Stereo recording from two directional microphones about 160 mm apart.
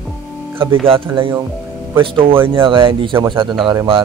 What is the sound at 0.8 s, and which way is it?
A man's voice, 35° right (ahead or behind).